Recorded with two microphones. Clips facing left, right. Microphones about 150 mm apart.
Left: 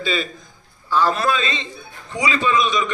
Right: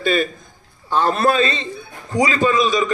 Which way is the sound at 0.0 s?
50° right (ahead or behind).